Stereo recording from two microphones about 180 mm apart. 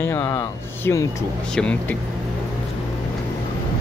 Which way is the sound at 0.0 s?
15° left (ahead or behind).